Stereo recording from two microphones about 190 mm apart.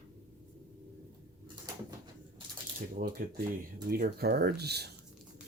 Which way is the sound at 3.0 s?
45° right (ahead or behind).